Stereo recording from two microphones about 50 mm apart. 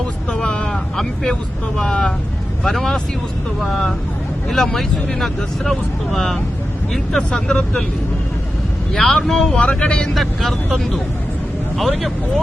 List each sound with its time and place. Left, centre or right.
0.3 s vehicle: centre
0.7 s speech: centre
8.9 s speech: centre
9.6 s speech: left
10.2 s speech: centre